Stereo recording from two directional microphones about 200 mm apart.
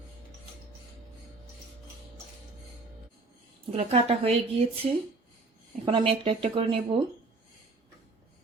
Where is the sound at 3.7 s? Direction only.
30° right (ahead or behind).